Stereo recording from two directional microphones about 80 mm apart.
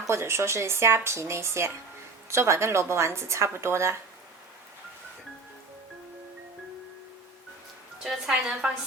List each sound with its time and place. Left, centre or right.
0.1 s speech: right
8.0 s a woman's voice: centre